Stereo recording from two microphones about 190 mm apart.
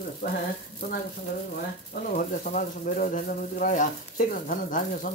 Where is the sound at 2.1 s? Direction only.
45° left (ahead or behind).